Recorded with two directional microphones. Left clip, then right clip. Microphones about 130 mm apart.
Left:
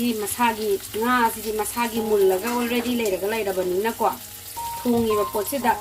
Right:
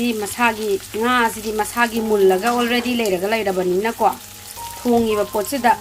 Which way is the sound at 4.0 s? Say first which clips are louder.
Right 6 dB; 35° right (ahead or behind).